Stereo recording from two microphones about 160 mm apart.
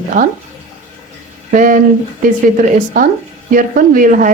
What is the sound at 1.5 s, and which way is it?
A woman's voice, 55° right (ahead or behind).